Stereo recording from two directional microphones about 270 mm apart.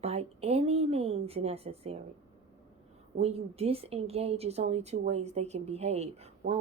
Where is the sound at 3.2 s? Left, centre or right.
Right.